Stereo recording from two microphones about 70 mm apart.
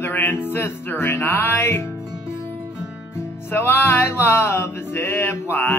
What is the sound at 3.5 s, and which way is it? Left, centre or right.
Music, left.